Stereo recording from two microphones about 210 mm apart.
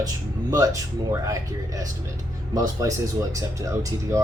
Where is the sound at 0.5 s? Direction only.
15° right (ahead or behind).